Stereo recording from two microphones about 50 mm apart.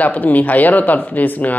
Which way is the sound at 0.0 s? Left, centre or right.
Left.